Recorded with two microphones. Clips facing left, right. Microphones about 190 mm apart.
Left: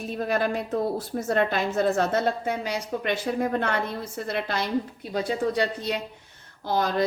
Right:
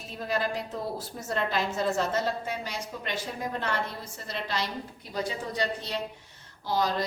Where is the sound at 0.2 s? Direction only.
55° left (ahead or behind).